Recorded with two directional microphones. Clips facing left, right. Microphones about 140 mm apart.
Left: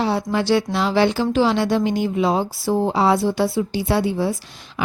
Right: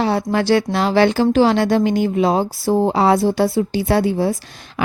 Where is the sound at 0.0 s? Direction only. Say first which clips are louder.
Right 3 dB; 55° right (ahead or behind).